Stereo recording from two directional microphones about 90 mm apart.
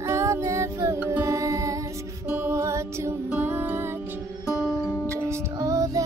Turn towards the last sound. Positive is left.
turn(degrees=-35)  # may be behind; listen again after turning